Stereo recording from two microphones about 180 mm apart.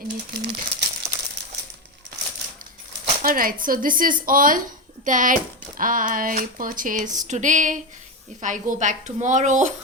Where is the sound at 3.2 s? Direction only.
50° right (ahead or behind).